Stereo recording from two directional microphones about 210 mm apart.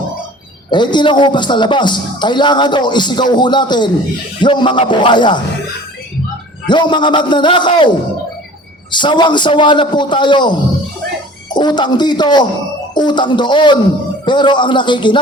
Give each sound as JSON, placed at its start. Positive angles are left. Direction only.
{"t": 0.7, "sound": "a man's voice", "side_deg": 20}
{"t": 6.7, "sound": "a man's voice", "side_deg": 20}
{"t": 8.9, "sound": "a man's voice", "side_deg": 20}